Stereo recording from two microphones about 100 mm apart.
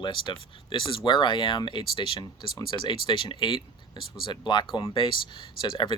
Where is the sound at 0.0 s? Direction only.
55° left (ahead or behind).